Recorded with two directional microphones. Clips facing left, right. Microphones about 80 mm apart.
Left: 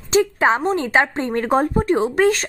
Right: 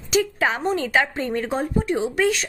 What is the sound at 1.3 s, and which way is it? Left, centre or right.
Speech, left.